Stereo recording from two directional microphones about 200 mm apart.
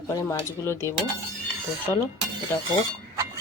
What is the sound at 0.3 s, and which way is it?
Speech, 15° left (ahead or behind).